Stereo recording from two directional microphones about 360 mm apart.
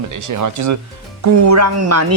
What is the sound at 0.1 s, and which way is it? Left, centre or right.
A woman's voice, right.